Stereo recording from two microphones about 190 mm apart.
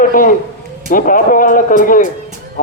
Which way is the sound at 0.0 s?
45° left (ahead or behind).